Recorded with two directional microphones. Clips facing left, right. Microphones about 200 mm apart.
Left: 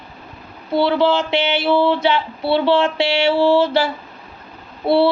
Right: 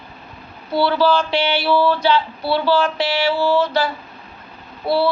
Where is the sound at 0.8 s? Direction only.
20° left (ahead or behind).